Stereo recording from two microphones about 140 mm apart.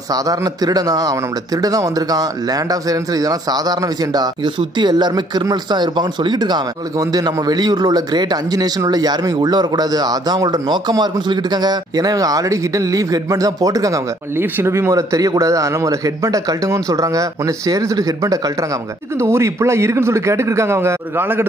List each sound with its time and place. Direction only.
0.1 s speech: 25° right (ahead or behind)